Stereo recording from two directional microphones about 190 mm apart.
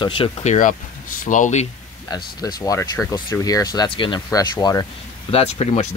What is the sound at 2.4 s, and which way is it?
Speech, 20° left (ahead or behind).